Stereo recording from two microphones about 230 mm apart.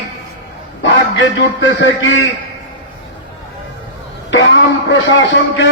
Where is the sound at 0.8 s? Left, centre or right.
Left.